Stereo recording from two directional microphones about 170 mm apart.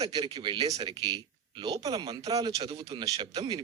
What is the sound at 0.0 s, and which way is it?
Speech, 20° right (ahead or behind).